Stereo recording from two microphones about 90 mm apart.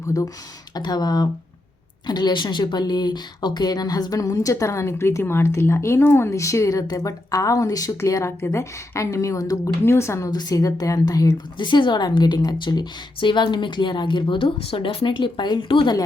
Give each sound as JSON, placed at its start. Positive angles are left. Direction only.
{"t": 0.7, "sound": "a woman's voice", "side_deg": 50}
{"t": 11.5, "sound": "a woman's voice", "side_deg": 60}
{"t": 13.1, "sound": "a woman's voice", "side_deg": 65}